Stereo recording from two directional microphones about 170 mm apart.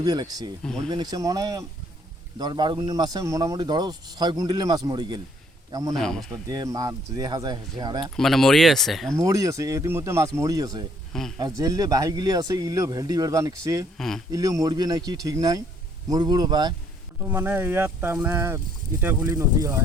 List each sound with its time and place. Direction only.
0.0 s speech: 25° right (ahead or behind)
5.9 s speech: centre (ahead or behind)
6.5 s speech: 20° right (ahead or behind)
8.1 s speech: centre (ahead or behind)
9.1 s speech: 20° right (ahead or behind)
11.1 s speech: 5° left (ahead or behind)
11.3 s speech: 25° right (ahead or behind)
17.2 s speech: 10° right (ahead or behind)